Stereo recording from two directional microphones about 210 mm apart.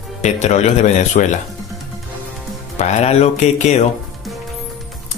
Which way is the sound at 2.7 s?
35° left (ahead or behind).